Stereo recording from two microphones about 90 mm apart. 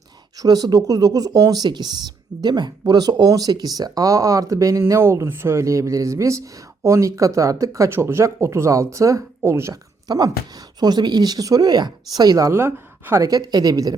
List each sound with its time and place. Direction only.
0.3 s speech: 45° right (ahead or behind); by 9.7 s 30° right (ahead or behind)
10.1 s speech: 45° right (ahead or behind); by 13.2 s 30° right (ahead or behind)
13.2 s speech: 45° right (ahead or behind)